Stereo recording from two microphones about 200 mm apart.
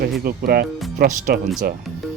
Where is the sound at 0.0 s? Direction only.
50° right (ahead or behind).